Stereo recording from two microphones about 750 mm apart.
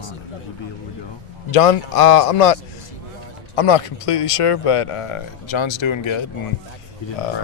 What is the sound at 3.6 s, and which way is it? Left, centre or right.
Speech, left.